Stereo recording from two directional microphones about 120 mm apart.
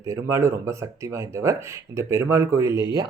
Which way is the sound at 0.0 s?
25° right (ahead or behind).